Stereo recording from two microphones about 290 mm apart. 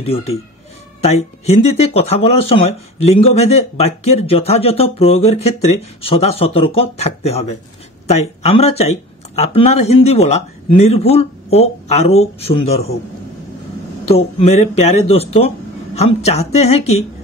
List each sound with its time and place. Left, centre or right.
0.0 s speech: centre
14.1 s speech: left